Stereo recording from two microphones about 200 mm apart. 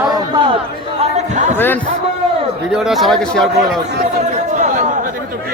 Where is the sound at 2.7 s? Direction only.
Centre (ahead or behind).